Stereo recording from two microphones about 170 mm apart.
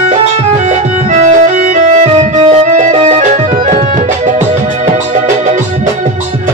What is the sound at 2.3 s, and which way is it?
Tabla, 45° right (ahead or behind).